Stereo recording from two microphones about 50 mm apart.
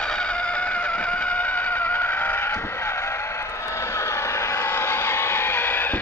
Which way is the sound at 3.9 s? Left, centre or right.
Left.